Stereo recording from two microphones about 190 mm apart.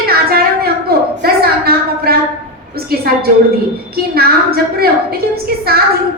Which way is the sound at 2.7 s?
55° right (ahead or behind).